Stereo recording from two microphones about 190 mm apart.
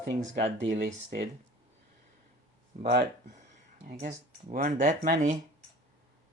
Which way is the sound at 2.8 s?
50° right (ahead or behind).